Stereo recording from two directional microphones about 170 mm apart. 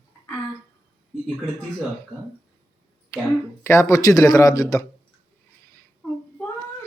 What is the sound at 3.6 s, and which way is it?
Speech, 15° left (ahead or behind).